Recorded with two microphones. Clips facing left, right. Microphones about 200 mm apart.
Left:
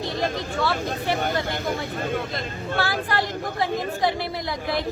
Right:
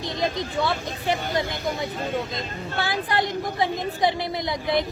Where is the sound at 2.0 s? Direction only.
55° left (ahead or behind).